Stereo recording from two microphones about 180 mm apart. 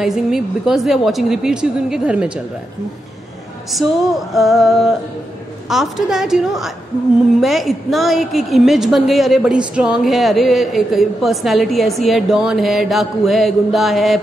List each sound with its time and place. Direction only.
0.0 s a woman's voice: centre (ahead or behind)
3.7 s a woman's voice: centre (ahead or behind)